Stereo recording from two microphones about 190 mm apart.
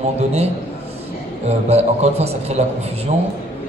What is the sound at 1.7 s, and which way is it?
Speech, 35° right (ahead or behind).